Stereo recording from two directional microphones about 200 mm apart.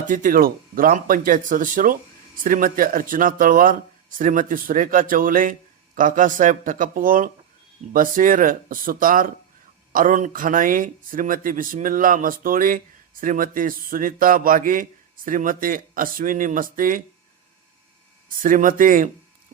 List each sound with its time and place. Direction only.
0.1 s speech: 40° right (ahead or behind)
18.4 s speech: 40° right (ahead or behind)